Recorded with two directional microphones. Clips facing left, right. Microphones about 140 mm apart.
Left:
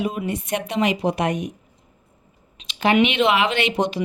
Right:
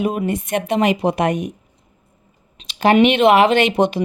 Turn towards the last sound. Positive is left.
turn(degrees=-55)  # may be behind; listen again after turning